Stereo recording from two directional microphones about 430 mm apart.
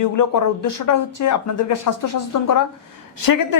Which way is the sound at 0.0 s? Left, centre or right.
Left.